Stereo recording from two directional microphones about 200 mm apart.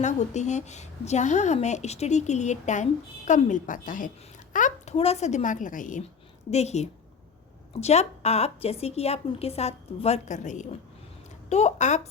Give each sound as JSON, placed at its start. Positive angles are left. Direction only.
{"t": 0.0, "sound": "a woman's voice", "side_deg": 35}